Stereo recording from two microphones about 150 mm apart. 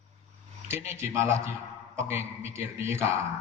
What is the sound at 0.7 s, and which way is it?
A man's voice, 15° right (ahead or behind).